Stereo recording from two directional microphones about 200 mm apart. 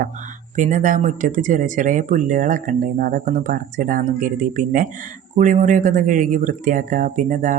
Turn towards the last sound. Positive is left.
turn(degrees=-40)  # may be behind; listen again after turning